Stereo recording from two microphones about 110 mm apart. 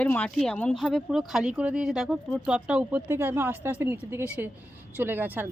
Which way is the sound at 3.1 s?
20° right (ahead or behind).